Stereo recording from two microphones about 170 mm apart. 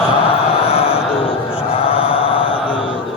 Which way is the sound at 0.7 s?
35° left (ahead or behind).